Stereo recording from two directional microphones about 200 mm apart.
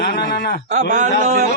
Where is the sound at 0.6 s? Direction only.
35° right (ahead or behind).